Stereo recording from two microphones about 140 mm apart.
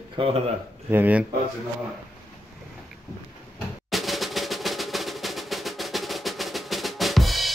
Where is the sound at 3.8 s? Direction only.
Centre (ahead or behind).